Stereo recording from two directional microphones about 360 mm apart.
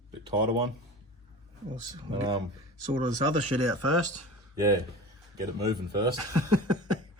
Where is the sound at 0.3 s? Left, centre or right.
Centre.